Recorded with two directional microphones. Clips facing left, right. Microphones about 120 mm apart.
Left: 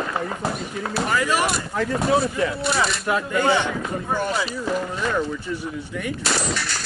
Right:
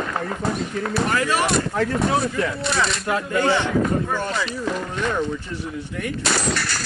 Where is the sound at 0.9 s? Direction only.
5° left (ahead or behind).